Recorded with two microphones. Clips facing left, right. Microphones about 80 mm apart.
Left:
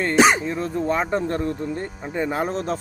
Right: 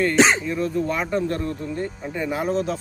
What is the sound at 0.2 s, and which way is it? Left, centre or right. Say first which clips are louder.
Speech: left 3 dB; centre.